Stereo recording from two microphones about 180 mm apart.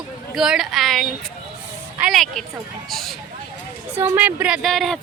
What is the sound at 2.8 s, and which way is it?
Speech, centre (ahead or behind).